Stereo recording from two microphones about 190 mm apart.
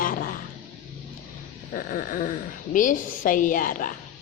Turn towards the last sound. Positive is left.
turn(degrees=45)  # may be behind; listen again after turning